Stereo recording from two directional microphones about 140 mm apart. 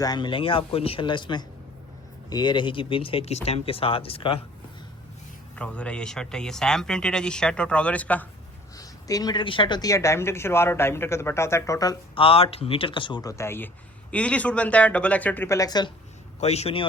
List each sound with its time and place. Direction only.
0.0 s speech: 30° left (ahead or behind)
5.5 s speech: 10° left (ahead or behind)
8.8 s speech: 25° left (ahead or behind)
12.1 s speech: 40° left (ahead or behind)
16.4 s speech: 50° left (ahead or behind)